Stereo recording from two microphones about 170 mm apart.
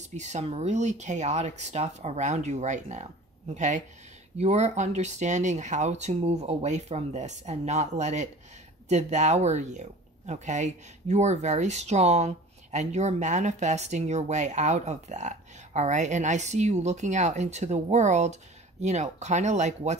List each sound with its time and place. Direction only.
0.1 s speech: 45° right (ahead or behind)